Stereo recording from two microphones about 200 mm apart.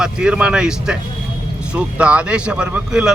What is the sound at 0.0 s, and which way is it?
A man's voice, 5° right (ahead or behind).